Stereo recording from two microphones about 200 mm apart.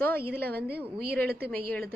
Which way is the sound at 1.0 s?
50° right (ahead or behind).